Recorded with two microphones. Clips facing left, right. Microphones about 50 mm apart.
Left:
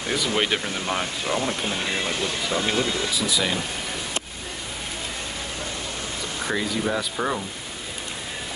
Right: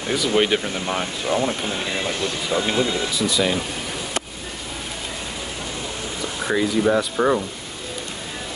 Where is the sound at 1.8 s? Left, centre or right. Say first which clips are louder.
Right 2 dB; centre.